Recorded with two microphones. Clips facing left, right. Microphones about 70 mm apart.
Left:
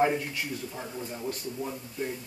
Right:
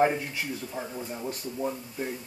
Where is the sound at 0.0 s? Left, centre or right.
Centre.